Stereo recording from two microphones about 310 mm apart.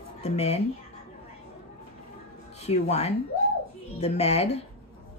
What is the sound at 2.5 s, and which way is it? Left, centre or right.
A woman's voice, left.